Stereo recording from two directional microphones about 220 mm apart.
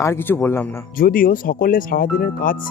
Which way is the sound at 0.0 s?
10° left (ahead or behind).